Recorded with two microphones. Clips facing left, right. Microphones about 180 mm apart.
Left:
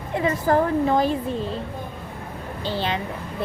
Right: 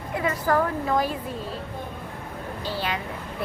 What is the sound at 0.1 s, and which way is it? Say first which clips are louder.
A woman's voice: left 3 dB; 25° left (ahead or behind).